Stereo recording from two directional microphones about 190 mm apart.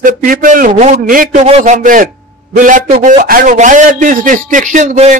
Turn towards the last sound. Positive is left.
turn(degrees=-40)  # may be behind; listen again after turning